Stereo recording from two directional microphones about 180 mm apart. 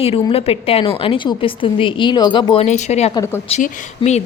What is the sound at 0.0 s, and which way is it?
A woman's voice, 30° left (ahead or behind).